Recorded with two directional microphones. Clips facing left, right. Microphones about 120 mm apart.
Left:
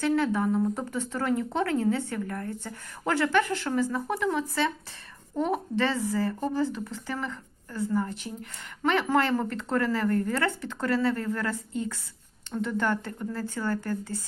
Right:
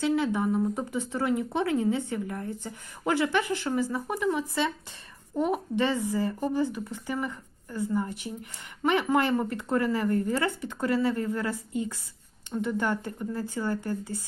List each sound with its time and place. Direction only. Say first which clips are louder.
0.0 s speech: left 1 dB; 15° right (ahead or behind)